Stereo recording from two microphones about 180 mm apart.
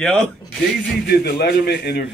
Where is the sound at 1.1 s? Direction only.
65° left (ahead or behind).